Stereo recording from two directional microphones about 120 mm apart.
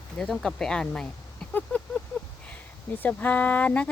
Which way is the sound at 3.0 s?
15° left (ahead or behind).